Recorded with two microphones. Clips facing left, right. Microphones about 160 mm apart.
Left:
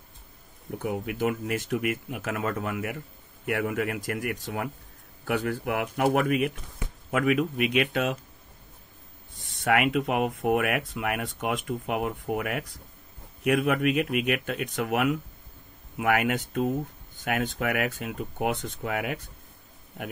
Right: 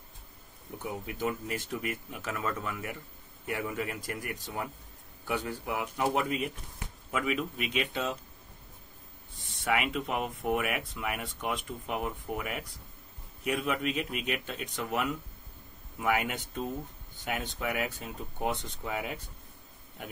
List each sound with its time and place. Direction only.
1.0 s speech: 65° left (ahead or behind)
9.7 s speech: 55° left (ahead or behind)